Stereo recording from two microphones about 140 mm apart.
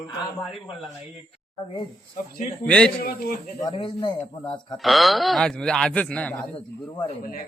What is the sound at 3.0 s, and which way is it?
Speech, 90° left.